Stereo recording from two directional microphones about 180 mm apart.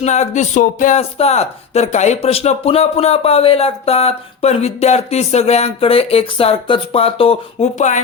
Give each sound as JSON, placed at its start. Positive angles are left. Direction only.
{"t": 0.0, "sound": "speech", "side_deg": 40}